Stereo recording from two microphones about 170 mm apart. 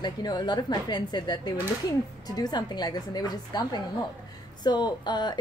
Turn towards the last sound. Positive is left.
turn(degrees=25)  # may be behind; listen again after turning